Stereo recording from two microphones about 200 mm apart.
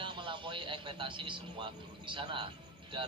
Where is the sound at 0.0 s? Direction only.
25° right (ahead or behind).